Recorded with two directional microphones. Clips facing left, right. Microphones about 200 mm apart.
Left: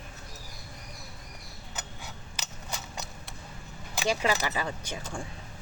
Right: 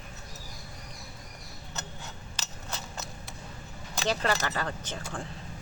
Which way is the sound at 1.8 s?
15° left (ahead or behind).